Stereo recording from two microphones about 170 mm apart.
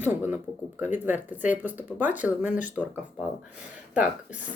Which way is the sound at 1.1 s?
10° right (ahead or behind).